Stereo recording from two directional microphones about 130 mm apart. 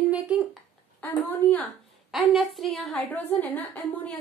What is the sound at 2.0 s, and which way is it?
A woman's voice, 5° right (ahead or behind).